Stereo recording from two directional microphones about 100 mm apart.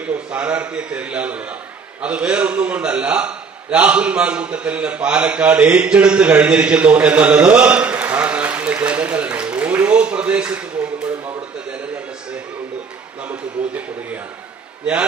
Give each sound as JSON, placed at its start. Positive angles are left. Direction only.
{"t": 0.1, "sound": "a man's voice", "side_deg": -15}
{"t": 8.8, "sound": "a sound", "side_deg": -15}
{"t": 13.3, "sound": "a man's voice", "side_deg": -15}